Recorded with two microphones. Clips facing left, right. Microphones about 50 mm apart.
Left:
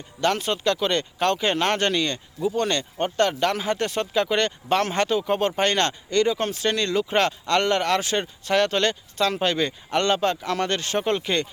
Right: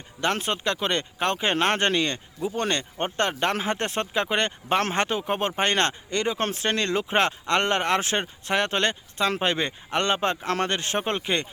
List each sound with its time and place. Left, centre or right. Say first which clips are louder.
0.2 s speech: left 2 dB; right
6.4 s speech: left 1 dB; right
10.7 s speech: left 3 dB; right